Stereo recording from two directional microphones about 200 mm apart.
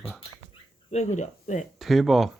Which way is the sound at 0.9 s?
35° left (ahead or behind).